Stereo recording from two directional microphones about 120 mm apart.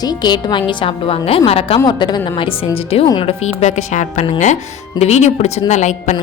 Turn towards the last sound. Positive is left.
turn(degrees=85)